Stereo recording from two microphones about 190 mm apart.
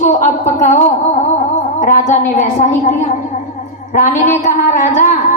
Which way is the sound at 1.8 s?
40° left (ahead or behind).